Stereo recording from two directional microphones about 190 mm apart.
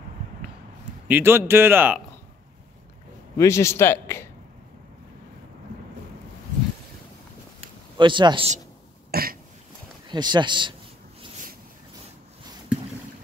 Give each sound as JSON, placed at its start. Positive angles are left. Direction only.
{"t": 1.0, "sound": "a man's voice", "side_deg": -10}
{"t": 3.3, "sound": "a man's voice", "side_deg": 15}
{"t": 8.0, "sound": "speech", "side_deg": -25}
{"t": 9.1, "sound": "throat clearing", "side_deg": -50}
{"t": 10.0, "sound": "speech", "side_deg": -25}